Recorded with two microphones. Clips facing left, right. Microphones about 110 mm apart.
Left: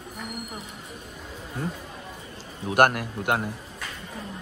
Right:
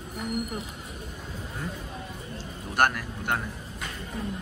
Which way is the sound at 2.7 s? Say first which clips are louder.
Left 5 dB; 50° left (ahead or behind).